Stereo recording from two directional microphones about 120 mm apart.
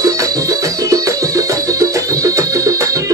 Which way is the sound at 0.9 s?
30° right (ahead or behind).